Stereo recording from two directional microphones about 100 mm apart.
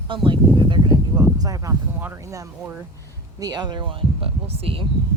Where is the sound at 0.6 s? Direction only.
55° right (ahead or behind).